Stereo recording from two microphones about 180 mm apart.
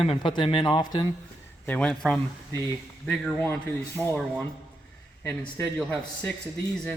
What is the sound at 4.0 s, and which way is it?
Speech, 15° right (ahead or behind).